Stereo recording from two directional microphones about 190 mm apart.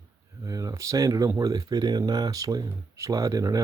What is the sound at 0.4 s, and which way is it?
Speech, 20° right (ahead or behind).